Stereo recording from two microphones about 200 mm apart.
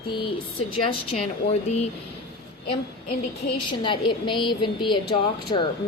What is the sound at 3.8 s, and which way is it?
A woman's voice, 25° left (ahead or behind).